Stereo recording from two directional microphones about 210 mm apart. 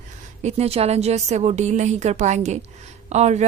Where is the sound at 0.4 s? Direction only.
30° right (ahead or behind).